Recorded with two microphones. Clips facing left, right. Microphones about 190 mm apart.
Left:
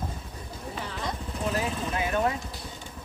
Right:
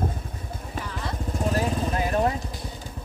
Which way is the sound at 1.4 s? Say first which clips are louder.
Right 4 dB; 40° right (ahead or behind).